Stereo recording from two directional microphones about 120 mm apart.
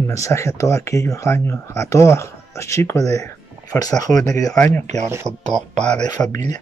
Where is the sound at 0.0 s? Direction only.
25° left (ahead or behind).